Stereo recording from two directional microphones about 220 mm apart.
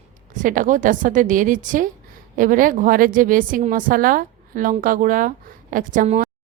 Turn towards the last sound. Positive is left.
turn(degrees=-35)  # may be behind; listen again after turning